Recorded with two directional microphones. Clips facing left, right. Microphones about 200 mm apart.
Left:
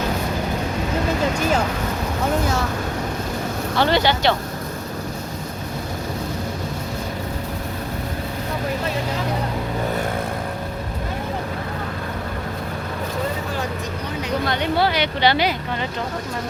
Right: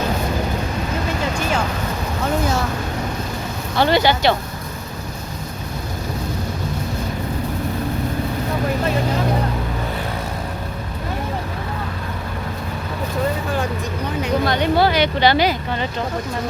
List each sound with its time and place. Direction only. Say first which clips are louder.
3.8 s speech: right 3 dB; 10° right (ahead or behind)
14.4 s speech: right 3 dB; 40° right (ahead or behind)